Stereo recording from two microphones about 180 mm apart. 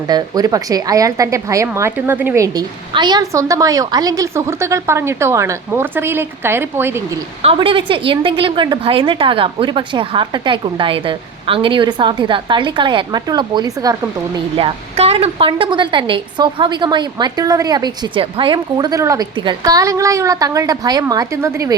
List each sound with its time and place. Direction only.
0.1 s a woman's voice: 20° right (ahead or behind)
7.4 s a woman's voice: 30° right (ahead or behind)
14.3 s a woman's voice: 30° right (ahead or behind); by 21.8 s 15° right (ahead or behind)